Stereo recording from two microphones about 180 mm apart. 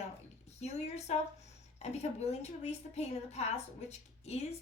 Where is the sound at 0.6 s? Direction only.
35° left (ahead or behind).